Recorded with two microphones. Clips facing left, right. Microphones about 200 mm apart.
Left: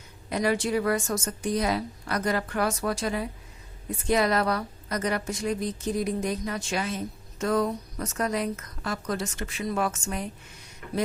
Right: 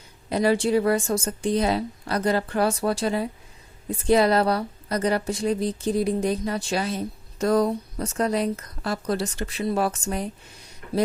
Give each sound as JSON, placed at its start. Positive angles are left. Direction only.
{"t": 0.3, "sound": "a woman's voice", "side_deg": -30}